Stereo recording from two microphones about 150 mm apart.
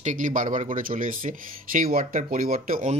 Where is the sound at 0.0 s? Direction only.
60° right (ahead or behind).